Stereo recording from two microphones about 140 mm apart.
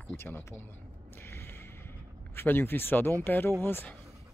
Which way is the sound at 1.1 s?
15° left (ahead or behind).